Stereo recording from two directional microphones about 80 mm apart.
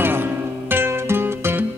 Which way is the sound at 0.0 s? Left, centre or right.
Right.